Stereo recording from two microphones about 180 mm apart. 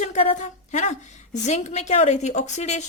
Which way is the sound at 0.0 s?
40° left (ahead or behind).